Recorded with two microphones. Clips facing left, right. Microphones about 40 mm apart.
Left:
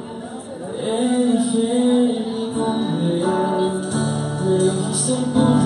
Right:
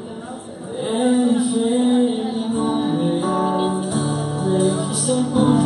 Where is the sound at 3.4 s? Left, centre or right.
Centre.